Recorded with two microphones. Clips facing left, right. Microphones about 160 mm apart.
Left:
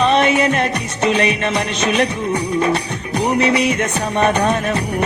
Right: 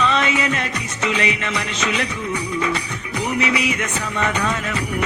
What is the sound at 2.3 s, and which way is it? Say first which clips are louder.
Music: left 5 dB; 40° left (ahead or behind).